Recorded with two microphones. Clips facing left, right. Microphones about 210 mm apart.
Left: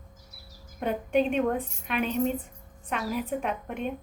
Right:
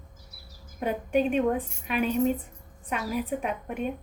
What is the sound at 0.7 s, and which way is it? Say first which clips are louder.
A woman's voice: even; 5° right (ahead or behind).